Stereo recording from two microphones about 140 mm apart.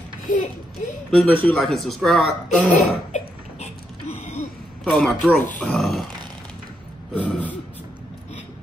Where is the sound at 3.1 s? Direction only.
55° left (ahead or behind).